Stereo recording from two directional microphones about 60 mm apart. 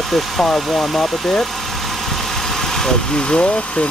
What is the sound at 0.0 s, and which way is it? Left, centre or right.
Speech, centre.